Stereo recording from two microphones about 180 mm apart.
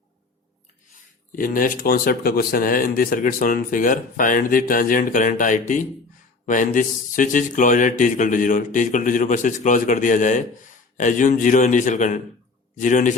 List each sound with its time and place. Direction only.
1.4 s speech: 50° left (ahead or behind)